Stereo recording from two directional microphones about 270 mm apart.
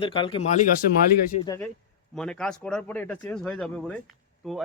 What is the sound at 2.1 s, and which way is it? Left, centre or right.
Speech, centre.